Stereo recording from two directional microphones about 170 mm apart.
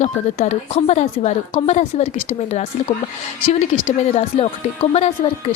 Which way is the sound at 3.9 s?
40° left (ahead or behind).